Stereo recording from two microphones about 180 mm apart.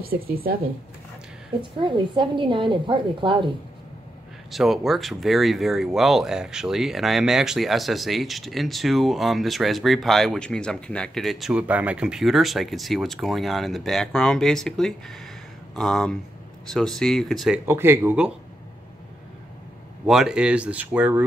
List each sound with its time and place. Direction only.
0.0 s speech: 55° right (ahead or behind)
1.6 s a woman's voice: 25° right (ahead or behind)
4.5 s speech: centre (ahead or behind)
17.6 s speech: 15° right (ahead or behind)
20.1 s speech: 5° right (ahead or behind)